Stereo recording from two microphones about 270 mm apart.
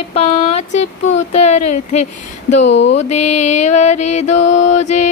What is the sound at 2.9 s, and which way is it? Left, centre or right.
Music, left.